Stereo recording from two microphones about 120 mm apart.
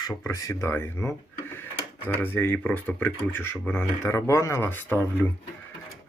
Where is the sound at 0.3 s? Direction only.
20° left (ahead or behind).